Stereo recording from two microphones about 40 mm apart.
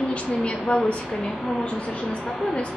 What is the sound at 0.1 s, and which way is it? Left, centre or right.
Speech, left.